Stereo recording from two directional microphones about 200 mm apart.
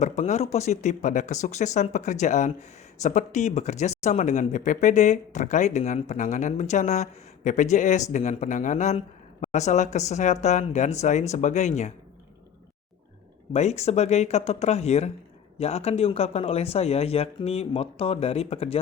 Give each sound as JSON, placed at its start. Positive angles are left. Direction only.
{"t": 0.0, "sound": "speech", "side_deg": 35}
{"t": 13.5, "sound": "speech", "side_deg": 35}